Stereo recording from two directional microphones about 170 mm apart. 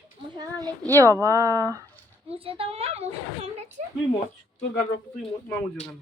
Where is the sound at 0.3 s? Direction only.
25° right (ahead or behind).